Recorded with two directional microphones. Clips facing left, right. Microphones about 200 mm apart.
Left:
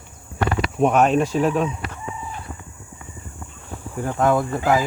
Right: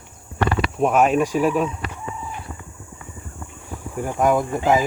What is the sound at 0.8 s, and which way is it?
Speech, 5° right (ahead or behind).